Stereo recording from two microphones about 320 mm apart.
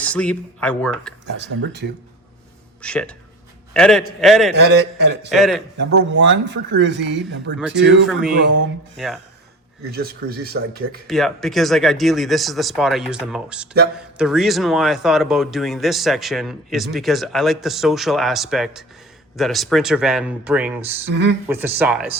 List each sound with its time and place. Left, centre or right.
0.0 s a man's voice: centre
1.4 s speech: right
2.8 s a man's voice: centre
4.5 s speech: right
5.3 s a man's voice: centre
5.7 s speech: right
8.0 s a man's voice: centre
8.4 s speech: right
9.0 s a man's voice: centre
9.9 s speech: right
11.0 s a man's voice: centre
21.1 s speech: right
21.4 s a man's voice: centre